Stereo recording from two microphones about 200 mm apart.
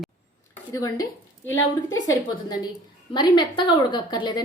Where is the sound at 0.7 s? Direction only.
20° left (ahead or behind).